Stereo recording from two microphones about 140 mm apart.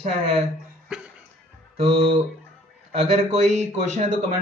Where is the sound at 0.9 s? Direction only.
5° right (ahead or behind).